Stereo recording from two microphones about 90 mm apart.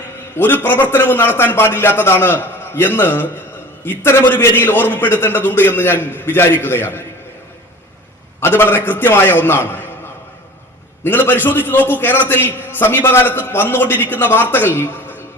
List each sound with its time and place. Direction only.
0.3 s a man's voice: 20° left (ahead or behind)
8.4 s a man's voice: 25° left (ahead or behind)
11.0 s a man's voice: 25° left (ahead or behind)